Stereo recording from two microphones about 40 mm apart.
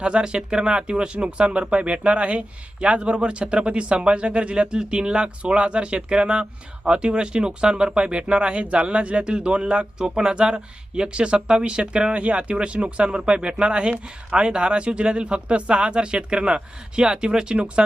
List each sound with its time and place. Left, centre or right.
0.0 s speech: right